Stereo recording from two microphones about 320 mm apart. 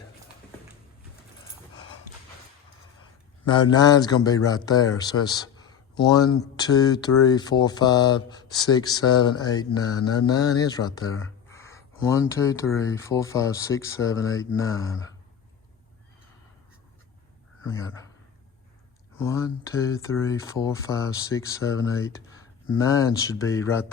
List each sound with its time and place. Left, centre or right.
3.5 s speech: centre
19.2 s speech: centre